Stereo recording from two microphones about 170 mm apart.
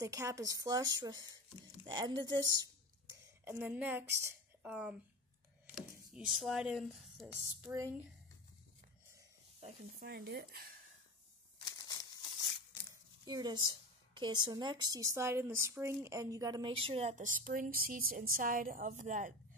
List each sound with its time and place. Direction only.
0.0 s speech: 20° right (ahead or behind)
3.4 s a woman's voice: 10° right (ahead or behind)
9.9 s speech: 60° right (ahead or behind)
11.6 s a sound: 20° left (ahead or behind)
13.2 s a woman's voice: 25° right (ahead or behind); by 19.3 s 50° right (ahead or behind)